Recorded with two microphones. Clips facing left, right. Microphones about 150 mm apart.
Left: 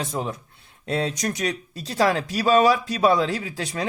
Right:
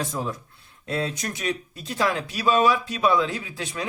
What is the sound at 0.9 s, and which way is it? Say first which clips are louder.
Speech: left 3 dB; 35° left (ahead or behind).